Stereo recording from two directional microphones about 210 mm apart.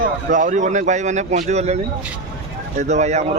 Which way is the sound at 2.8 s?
35° right (ahead or behind).